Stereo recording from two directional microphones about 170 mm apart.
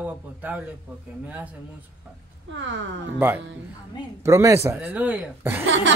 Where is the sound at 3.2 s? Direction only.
10° right (ahead or behind).